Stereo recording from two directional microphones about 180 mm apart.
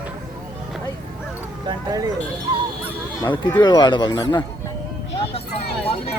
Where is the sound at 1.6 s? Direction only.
20° right (ahead or behind).